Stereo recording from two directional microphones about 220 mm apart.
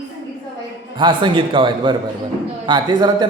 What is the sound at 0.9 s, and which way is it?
A man's voice, 20° right (ahead or behind).